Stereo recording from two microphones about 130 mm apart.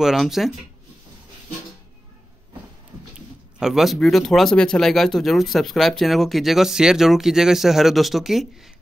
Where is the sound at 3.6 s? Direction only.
Centre (ahead or behind).